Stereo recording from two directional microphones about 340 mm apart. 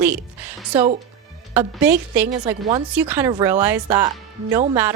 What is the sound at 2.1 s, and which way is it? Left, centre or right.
A woman's voice, centre.